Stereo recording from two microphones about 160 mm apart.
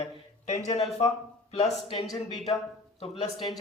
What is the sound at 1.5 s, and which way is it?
Speech, 40° left (ahead or behind).